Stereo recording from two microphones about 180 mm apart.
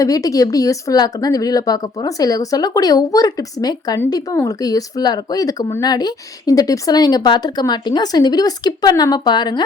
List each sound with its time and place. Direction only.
0.0 s speech: 20° left (ahead or behind)